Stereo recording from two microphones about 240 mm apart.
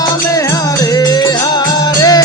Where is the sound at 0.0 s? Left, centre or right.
Centre.